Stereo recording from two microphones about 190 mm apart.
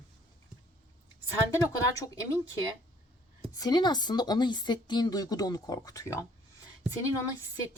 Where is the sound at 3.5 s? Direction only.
20° left (ahead or behind).